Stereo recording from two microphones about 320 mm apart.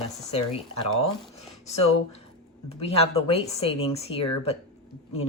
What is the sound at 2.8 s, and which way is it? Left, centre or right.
Speech, centre.